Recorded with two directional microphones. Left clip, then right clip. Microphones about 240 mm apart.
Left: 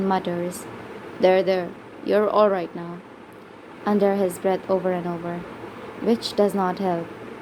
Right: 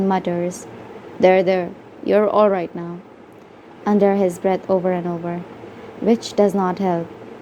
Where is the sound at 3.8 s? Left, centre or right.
Centre.